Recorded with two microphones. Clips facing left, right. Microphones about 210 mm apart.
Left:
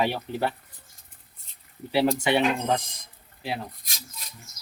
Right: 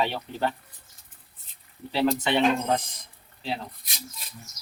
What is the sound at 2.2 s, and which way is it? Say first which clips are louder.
Speech: left 1 dB; 15° left (ahead or behind).